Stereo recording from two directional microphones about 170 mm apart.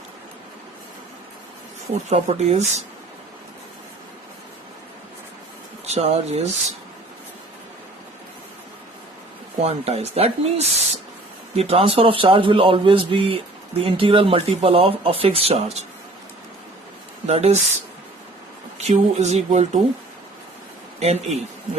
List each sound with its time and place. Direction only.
2.0 s speech: 40° right (ahead or behind)
5.8 s speech: 40° right (ahead or behind)
9.6 s speech: 35° right (ahead or behind)
17.2 s speech: 40° right (ahead or behind)
18.8 s speech: 40° right (ahead or behind)
21.0 s speech: 40° right (ahead or behind)